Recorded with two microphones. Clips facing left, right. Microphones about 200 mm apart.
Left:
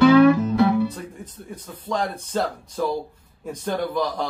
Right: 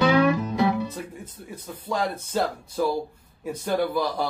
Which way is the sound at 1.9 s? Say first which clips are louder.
Left 1 dB; 5° right (ahead or behind).